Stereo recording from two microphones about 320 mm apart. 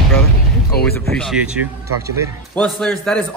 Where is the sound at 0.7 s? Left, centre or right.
Left.